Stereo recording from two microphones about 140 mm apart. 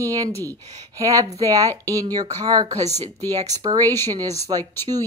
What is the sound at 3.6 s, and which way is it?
Speech, 25° right (ahead or behind).